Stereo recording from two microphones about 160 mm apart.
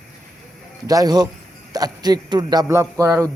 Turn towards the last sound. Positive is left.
turn(degrees=-20)  # may be behind; listen again after turning